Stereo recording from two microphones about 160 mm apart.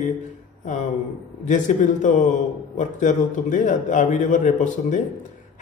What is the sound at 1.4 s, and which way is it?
A man's voice, 50° left (ahead or behind).